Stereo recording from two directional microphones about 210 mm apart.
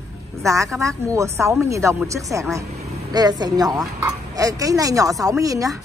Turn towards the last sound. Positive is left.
turn(degrees=-15)  # may be behind; listen again after turning